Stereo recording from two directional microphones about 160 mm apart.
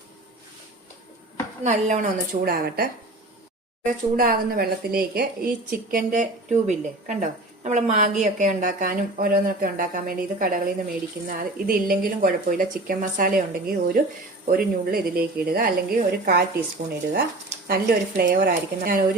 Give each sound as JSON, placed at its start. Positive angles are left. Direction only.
{"t": 1.6, "sound": "a woman's voice", "side_deg": -50}
{"t": 6.1, "sound": "a woman's voice", "side_deg": -50}
{"t": 17.7, "sound": "a woman's voice", "side_deg": -70}